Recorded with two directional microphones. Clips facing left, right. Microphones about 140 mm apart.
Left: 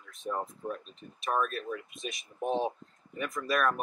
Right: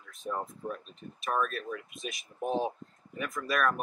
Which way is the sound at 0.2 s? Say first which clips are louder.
Left 1 dB; centre (ahead or behind).